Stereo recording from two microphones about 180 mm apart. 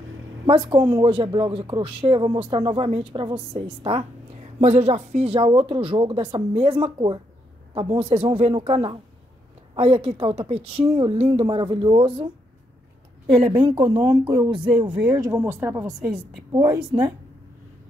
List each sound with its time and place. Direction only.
0.5 s speech: 30° right (ahead or behind)
4.6 s speech: 40° right (ahead or behind)
13.5 s speech: 25° right (ahead or behind)
16.5 s speech: 20° right (ahead or behind)